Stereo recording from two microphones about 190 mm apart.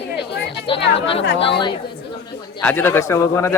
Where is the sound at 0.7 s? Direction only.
25° left (ahead or behind).